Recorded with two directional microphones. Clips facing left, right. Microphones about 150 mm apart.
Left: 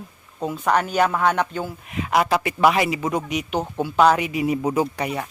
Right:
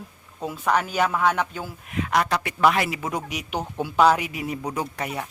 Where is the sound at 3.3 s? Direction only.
5° right (ahead or behind).